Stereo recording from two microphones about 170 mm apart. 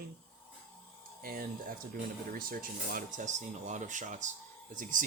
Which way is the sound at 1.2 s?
60° right (ahead or behind).